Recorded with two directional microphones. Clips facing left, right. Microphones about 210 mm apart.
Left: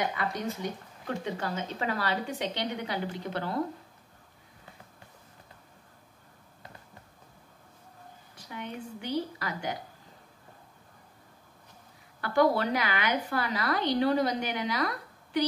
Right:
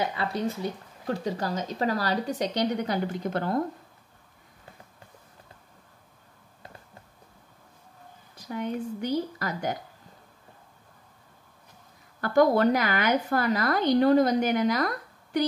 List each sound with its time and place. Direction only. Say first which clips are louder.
0.1 s speech: right 4 dB; 30° right (ahead or behind); by 3.6 s 45° right (ahead or behind)
8.5 s a woman's voice: right 8 dB; 45° right (ahead or behind)
12.2 s a woman's voice: right 4 dB; 45° right (ahead or behind)